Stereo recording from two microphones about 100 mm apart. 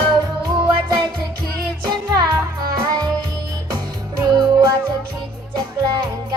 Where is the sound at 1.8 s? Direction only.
45° right (ahead or behind).